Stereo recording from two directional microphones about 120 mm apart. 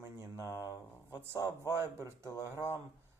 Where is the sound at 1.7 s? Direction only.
20° right (ahead or behind).